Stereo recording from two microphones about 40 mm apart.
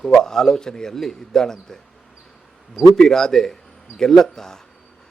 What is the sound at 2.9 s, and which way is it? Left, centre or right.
A man's voice, centre.